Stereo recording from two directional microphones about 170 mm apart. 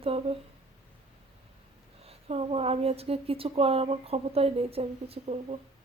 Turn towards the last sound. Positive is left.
turn(degrees=-35)  # may be behind; listen again after turning